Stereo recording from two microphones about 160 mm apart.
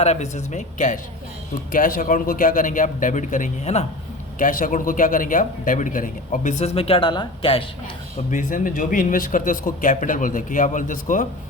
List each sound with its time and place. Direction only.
0.0 s speech: 45° left (ahead or behind)
4.4 s speech: 55° left (ahead or behind); by 7.6 s 30° left (ahead or behind)
8.3 s speech: 55° left (ahead or behind)